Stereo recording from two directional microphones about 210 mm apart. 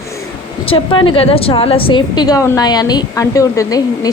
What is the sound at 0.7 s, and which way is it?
A woman's voice, 25° left (ahead or behind).